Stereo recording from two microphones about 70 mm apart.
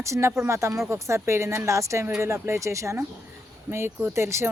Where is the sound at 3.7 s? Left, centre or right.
Right.